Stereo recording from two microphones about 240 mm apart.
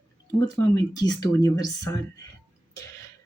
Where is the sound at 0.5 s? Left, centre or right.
Centre.